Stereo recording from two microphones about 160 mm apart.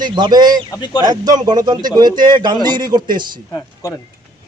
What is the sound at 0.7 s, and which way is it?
Speech, 25° left (ahead or behind).